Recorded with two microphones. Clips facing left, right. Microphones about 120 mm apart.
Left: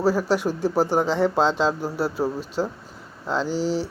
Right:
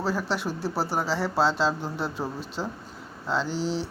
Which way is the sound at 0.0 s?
10° left (ahead or behind).